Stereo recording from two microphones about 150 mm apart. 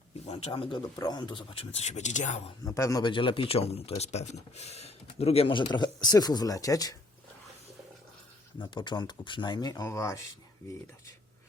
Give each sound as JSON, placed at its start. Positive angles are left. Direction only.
{"t": 0.3, "sound": "speech", "side_deg": 40}
{"t": 0.9, "sound": "speech", "side_deg": 25}
{"t": 2.6, "sound": "speech", "side_deg": 20}
{"t": 3.1, "sound": "speech", "side_deg": 35}
{"t": 8.5, "sound": "speech", "side_deg": 30}